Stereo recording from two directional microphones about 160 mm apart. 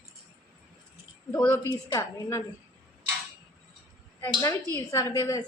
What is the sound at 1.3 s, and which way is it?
A woman's voice, 15° left (ahead or behind).